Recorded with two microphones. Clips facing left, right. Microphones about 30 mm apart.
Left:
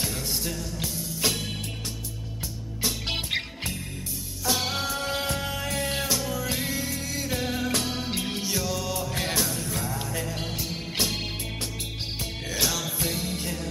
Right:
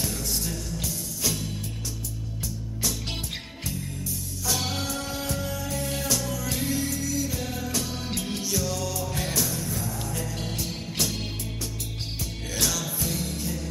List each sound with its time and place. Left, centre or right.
0.0 s music: left
1.2 s music: left
2.8 s music: left
4.5 s music: centre
5.1 s music: left
6.0 s music: left
6.9 s music: left
7.9 s music: left
8.8 s music: left
11.0 s music: left
12.5 s music: centre